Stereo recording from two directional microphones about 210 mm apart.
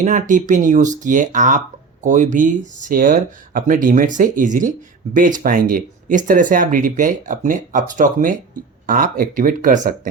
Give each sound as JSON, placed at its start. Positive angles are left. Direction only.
{"t": 0.0, "sound": "speech", "side_deg": -35}